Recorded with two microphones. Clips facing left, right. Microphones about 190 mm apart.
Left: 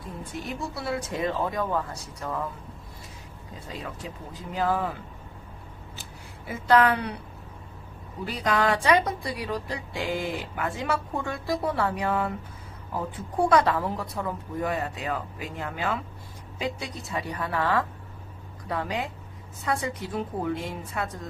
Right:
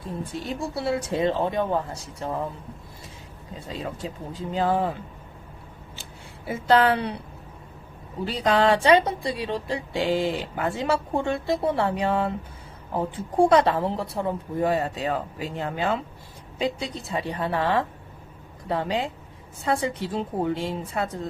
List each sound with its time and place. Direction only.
0.3 s a woman's voice: 30° right (ahead or behind)
3.7 s a woman's voice: 25° right (ahead or behind)
6.5 s a woman's voice: 30° right (ahead or behind)
8.2 s a woman's voice: 30° right (ahead or behind)